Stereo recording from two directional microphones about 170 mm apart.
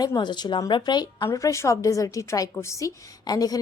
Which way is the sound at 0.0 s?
25° left (ahead or behind).